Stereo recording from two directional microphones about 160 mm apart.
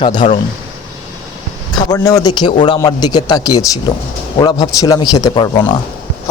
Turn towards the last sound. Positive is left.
turn(degrees=30)  # may be behind; listen again after turning